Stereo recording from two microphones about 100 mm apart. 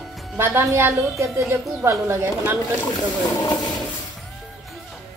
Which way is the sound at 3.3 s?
40° left (ahead or behind).